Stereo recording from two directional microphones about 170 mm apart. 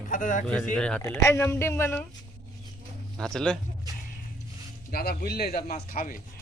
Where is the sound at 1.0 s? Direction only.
20° left (ahead or behind).